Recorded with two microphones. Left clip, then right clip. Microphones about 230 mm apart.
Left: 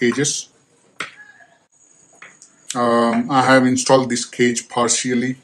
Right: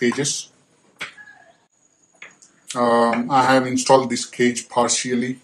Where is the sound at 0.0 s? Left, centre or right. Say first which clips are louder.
Left 3 dB; left.